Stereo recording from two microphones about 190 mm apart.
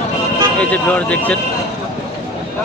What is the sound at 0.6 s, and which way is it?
Speech, 10° left (ahead or behind).